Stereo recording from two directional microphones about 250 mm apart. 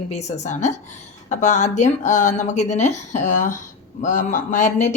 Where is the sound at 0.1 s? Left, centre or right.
Left.